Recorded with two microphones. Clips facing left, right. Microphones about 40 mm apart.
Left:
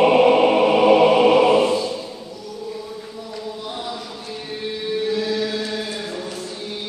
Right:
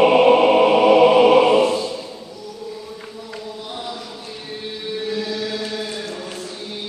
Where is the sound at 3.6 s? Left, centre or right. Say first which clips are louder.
Even; centre.